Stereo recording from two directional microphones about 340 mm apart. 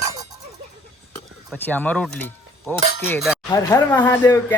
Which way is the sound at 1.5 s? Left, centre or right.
Centre.